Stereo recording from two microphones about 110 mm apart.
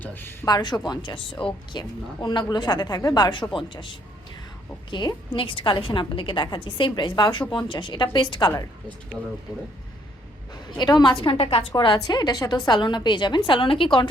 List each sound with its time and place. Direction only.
0.0 s speech: 20° left (ahead or behind)
0.4 s a woman's voice: 40° left (ahead or behind)
10.5 s a woman's voice: 40° left (ahead or behind); by 11.6 s 60° left (ahead or behind)
11.9 s a woman's voice: 35° left (ahead or behind)